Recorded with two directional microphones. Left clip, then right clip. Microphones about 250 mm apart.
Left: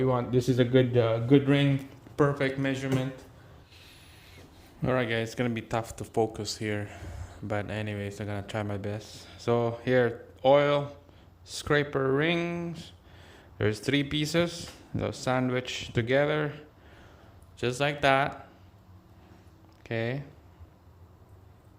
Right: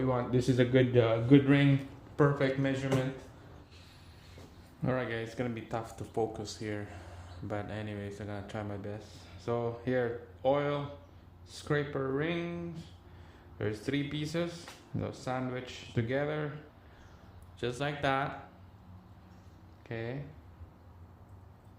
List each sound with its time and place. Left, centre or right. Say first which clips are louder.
0.0 s speech: left 4 dB; left
4.8 s speech: left 6 dB; left
17.6 s speech: left 7 dB; left
19.8 s speech: left 8 dB; left